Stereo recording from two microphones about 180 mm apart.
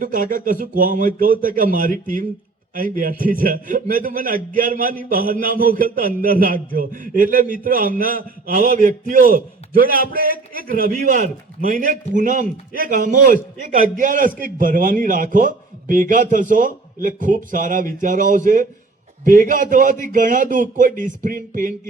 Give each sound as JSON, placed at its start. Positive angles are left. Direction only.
{"t": 0.0, "sound": "a man's voice", "side_deg": -50}